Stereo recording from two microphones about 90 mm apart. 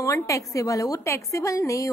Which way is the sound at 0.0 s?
40° left (ahead or behind).